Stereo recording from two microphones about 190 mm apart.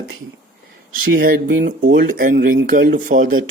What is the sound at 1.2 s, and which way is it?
Speech, 55° right (ahead or behind).